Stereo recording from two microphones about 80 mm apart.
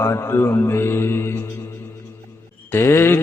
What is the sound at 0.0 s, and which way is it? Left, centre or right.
Mantra, left.